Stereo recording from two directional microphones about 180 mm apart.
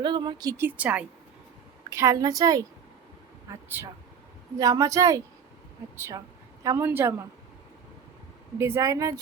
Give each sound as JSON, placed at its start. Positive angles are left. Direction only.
{"t": 0.0, "sound": "a woman's voice", "side_deg": -25}
{"t": 8.5, "sound": "speech", "side_deg": -15}